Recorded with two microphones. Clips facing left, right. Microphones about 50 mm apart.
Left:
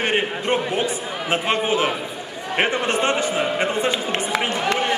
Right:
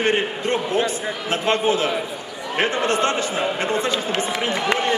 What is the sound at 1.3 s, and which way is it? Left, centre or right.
A man's voice, centre.